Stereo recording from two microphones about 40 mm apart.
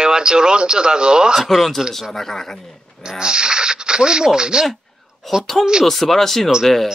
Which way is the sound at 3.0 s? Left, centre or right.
Centre.